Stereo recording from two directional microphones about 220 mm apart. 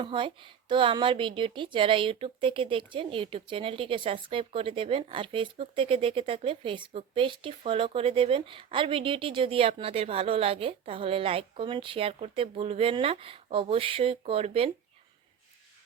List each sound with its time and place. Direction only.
0.0 s speech: 20° right (ahead or behind)